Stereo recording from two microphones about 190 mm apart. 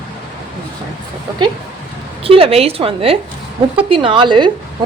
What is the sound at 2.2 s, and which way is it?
A woman's voice, 30° right (ahead or behind).